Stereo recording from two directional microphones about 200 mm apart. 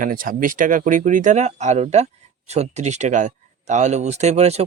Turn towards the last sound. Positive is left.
turn(degrees=-35)  # may be behind; listen again after turning